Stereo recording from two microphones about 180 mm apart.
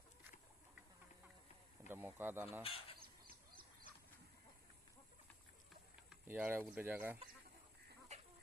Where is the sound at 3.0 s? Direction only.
55° right (ahead or behind).